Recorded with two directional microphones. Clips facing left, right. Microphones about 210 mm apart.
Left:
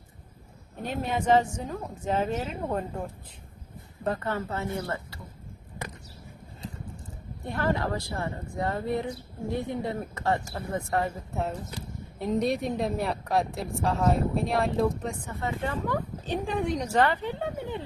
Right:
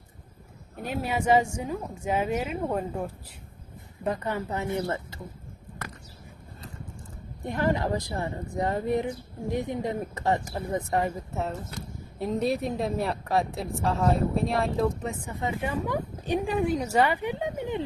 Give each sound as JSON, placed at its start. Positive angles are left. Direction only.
{"t": 0.8, "sound": "speech", "side_deg": -10}
{"t": 7.4, "sound": "speech", "side_deg": -15}
{"t": 12.2, "sound": "a woman's voice", "side_deg": 0}
{"t": 15.3, "sound": "speech", "side_deg": -15}